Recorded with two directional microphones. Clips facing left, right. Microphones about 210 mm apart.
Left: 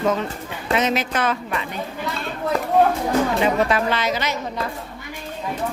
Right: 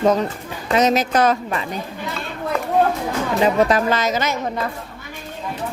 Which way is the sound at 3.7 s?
45° right (ahead or behind).